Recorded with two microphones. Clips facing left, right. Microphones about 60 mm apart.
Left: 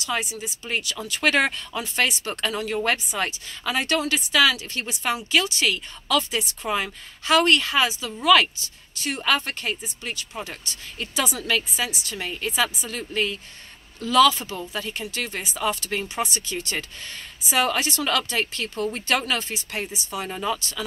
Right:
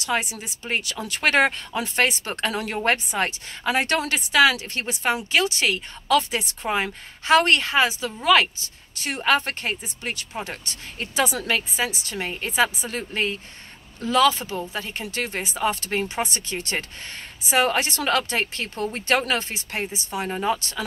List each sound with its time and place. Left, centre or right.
0.0 s speech: right
0.7 s speech: right
5.3 s speech: right
10.1 s speech: right
11.4 s speech: right
15.0 s speech: right
20.2 s speech: right
20.5 s speech: right